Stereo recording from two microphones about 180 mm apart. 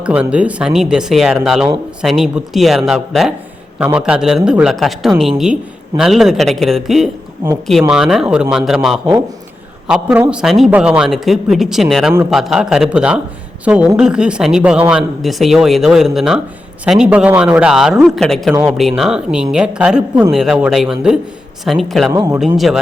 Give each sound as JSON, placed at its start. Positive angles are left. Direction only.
{"t": 0.0, "sound": "speech", "side_deg": -5}
{"t": 22.1, "sound": "speech", "side_deg": -20}
{"t": 22.5, "sound": "speech", "side_deg": 0}